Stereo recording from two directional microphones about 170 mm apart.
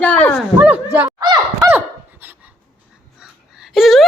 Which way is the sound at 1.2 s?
25° right (ahead or behind).